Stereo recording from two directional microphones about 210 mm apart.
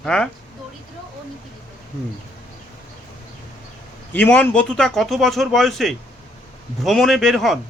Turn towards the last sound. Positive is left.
turn(degrees=0)  # may be behind; listen again after turning